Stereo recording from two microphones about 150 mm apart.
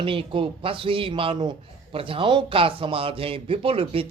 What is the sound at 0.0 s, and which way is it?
A man's voice, 35° right (ahead or behind).